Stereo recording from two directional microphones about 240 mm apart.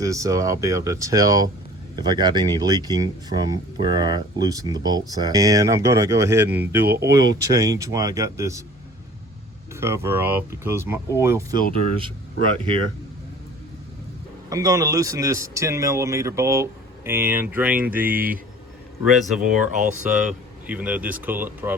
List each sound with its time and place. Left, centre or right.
0.0 s speech: centre
6.8 s speech: right
7.1 s speech: centre
9.8 s speech: centre
14.5 s speech: centre
19.5 s speech: right
20.1 s speech: centre